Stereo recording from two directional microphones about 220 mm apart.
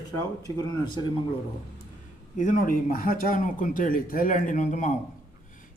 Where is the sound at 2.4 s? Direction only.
40° left (ahead or behind).